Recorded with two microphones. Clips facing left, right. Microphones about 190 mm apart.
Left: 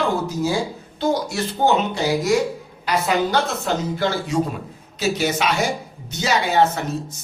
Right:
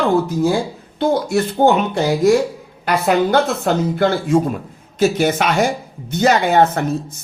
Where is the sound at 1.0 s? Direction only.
55° right (ahead or behind).